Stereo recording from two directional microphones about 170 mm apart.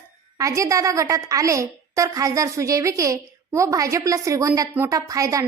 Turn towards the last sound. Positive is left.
turn(degrees=-20)  # may be behind; listen again after turning